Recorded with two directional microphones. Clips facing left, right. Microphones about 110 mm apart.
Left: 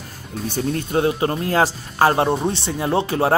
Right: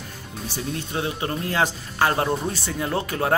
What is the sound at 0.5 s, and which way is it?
Speech, 45° left (ahead or behind).